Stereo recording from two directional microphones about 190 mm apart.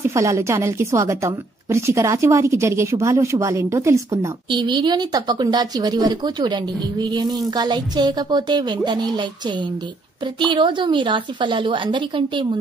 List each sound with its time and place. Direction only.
0.0 s a woman's voice: 15° right (ahead or behind)
10.5 s a woman's voice: 25° right (ahead or behind)